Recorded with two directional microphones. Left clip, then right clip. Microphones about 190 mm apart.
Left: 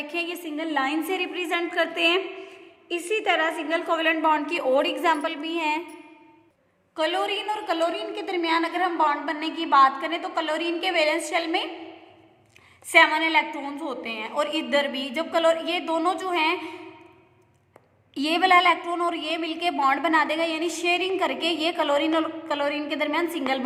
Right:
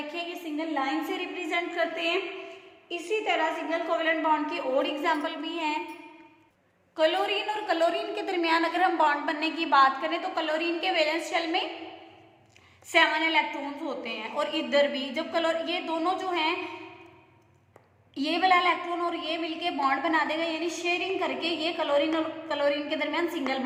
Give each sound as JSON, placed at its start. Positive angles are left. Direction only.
{"t": 0.1, "sound": "a woman's voice", "side_deg": 40}
{"t": 6.9, "sound": "a woman's voice", "side_deg": 25}
{"t": 12.9, "sound": "a woman's voice", "side_deg": 25}
{"t": 18.1, "sound": "a woman's voice", "side_deg": 30}